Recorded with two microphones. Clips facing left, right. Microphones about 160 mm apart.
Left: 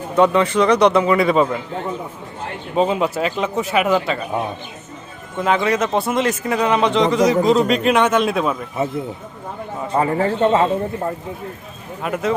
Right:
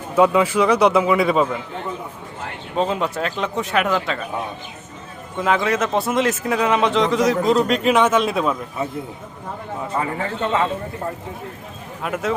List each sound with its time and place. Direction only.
0.2 s speech: 5° right (ahead or behind)
2.7 s speech: 5° left (ahead or behind)
5.4 s speech: centre (ahead or behind)
10.0 s a man's voice: 35° left (ahead or behind)
12.0 s speech: centre (ahead or behind)